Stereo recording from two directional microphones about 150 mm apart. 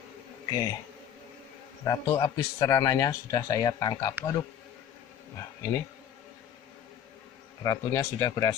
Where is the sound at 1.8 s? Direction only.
25° left (ahead or behind).